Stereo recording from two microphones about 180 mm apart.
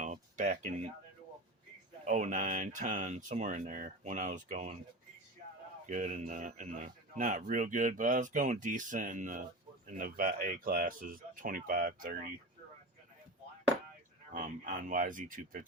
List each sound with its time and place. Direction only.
0.0 s a sound: 45° right (ahead or behind)
2.0 s a man's voice: 45° right (ahead or behind)
5.8 s a man's voice: 45° right (ahead or behind)
14.3 s a man's voice: 45° right (ahead or behind)